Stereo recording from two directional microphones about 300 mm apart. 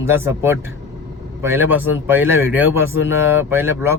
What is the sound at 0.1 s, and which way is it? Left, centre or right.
A man's voice, centre.